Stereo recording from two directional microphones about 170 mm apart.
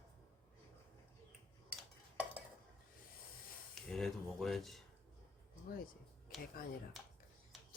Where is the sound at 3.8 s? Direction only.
Centre (ahead or behind).